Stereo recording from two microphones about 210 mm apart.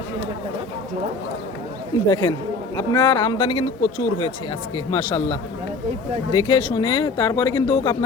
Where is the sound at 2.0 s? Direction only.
20° left (ahead or behind).